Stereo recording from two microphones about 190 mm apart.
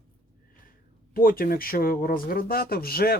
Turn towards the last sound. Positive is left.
turn(degrees=55)  # may be behind; listen again after turning